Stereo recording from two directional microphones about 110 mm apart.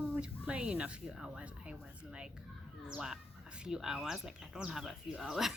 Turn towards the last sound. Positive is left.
turn(degrees=-5)  # may be behind; listen again after turning